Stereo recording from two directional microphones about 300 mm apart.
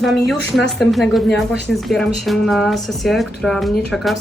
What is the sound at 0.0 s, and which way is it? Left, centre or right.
Speech, centre.